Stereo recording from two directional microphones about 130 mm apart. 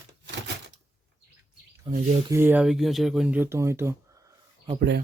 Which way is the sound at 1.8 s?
45° right (ahead or behind).